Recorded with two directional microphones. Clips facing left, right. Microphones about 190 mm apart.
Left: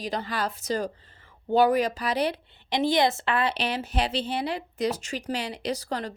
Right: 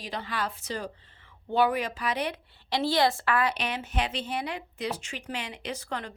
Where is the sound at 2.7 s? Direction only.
20° left (ahead or behind).